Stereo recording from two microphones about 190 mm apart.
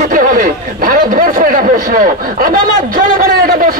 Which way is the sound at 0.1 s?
45° right (ahead or behind).